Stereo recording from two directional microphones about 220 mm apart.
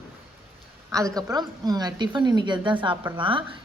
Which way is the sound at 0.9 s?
15° right (ahead or behind).